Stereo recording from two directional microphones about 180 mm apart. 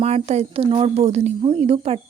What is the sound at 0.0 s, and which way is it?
A woman's voice, 35° right (ahead or behind).